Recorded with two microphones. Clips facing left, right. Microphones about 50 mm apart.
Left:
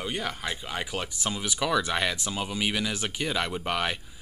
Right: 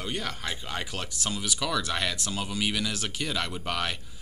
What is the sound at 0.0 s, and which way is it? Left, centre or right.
Speech, centre.